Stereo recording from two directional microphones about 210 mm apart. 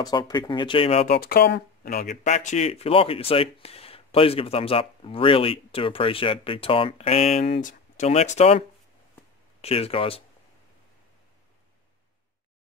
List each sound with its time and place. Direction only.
0.0 s speech: 20° left (ahead or behind)
1.0 s speech: 45° left (ahead or behind); by 10.2 s 25° left (ahead or behind)